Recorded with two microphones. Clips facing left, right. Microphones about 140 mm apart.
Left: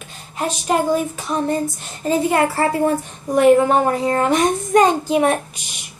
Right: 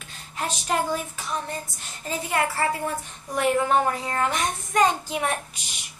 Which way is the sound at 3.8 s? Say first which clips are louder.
Left 8 dB; 35° left (ahead or behind).